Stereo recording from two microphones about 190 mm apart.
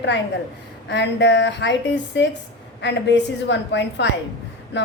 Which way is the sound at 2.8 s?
65° left (ahead or behind).